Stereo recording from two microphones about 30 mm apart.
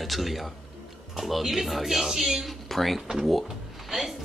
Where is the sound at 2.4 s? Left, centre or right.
Centre.